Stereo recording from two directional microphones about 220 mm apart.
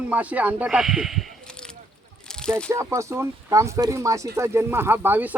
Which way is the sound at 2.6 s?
10° right (ahead or behind).